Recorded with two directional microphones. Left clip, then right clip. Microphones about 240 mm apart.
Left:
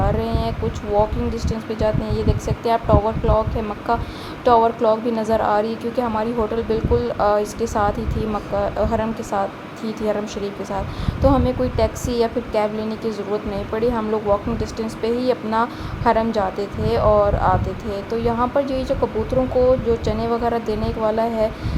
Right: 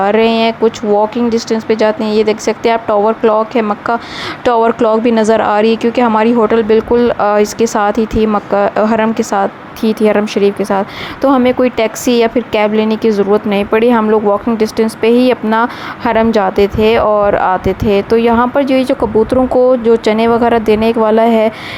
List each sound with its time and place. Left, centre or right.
0.0 s speech: right